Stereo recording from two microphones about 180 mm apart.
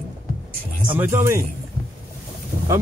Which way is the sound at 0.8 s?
10° right (ahead or behind).